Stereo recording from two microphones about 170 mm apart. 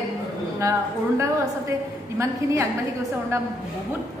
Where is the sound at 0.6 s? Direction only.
15° right (ahead or behind).